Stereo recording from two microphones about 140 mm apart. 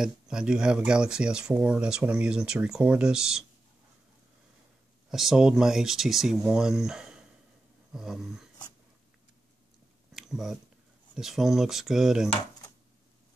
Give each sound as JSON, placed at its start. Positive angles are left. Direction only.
{"t": 0.0, "sound": "speech", "side_deg": -5}
{"t": 5.1, "sound": "speech", "side_deg": -5}
{"t": 10.1, "sound": "a sound", "side_deg": -5}
{"t": 11.1, "sound": "speech", "side_deg": -5}